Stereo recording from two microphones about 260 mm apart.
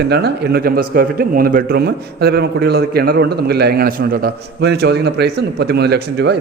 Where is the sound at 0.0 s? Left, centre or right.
Right.